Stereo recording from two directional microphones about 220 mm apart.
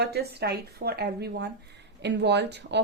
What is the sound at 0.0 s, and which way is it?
Speech, 45° right (ahead or behind).